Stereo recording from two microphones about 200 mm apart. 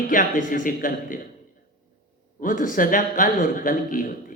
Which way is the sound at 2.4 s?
45° left (ahead or behind).